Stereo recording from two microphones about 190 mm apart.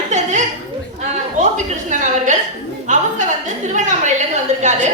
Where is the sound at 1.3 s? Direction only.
40° right (ahead or behind).